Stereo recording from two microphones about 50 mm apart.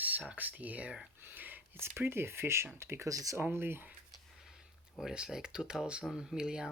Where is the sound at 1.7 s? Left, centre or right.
Right.